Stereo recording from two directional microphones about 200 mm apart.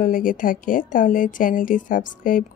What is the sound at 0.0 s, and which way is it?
Speech, 45° left (ahead or behind).